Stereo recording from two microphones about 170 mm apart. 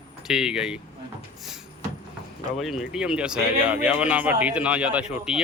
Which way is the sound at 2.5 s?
Centre (ahead or behind).